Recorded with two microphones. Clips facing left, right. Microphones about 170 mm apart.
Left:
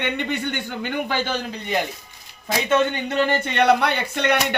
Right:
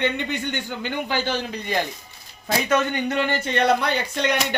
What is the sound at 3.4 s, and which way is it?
Speech, 65° left (ahead or behind).